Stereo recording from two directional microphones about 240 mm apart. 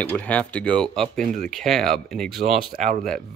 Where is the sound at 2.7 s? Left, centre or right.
Right.